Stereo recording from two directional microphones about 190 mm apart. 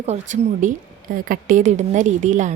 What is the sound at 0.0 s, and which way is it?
A woman's voice, 35° right (ahead or behind).